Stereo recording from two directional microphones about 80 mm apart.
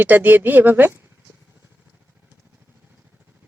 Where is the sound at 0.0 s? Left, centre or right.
Right.